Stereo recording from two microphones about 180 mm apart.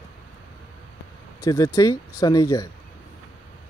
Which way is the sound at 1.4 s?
20° left (ahead or behind).